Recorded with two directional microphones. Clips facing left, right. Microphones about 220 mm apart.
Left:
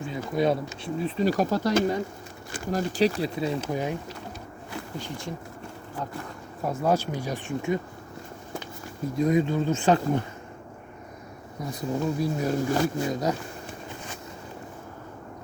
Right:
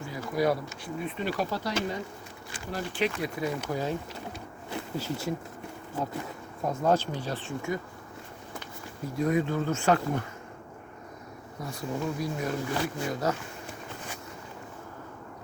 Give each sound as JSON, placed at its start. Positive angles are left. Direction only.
{"t": 0.0, "sound": "speech", "side_deg": 25}
{"t": 4.9, "sound": "speech", "side_deg": -5}
{"t": 6.7, "sound": "speech", "side_deg": 10}
{"t": 9.1, "sound": "speech", "side_deg": 20}
{"t": 11.7, "sound": "speech", "side_deg": 20}
{"t": 12.4, "sound": "speech", "side_deg": 40}
{"t": 13.1, "sound": "speech", "side_deg": 15}